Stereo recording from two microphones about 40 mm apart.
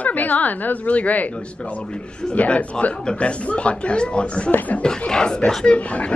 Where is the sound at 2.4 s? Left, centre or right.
Left.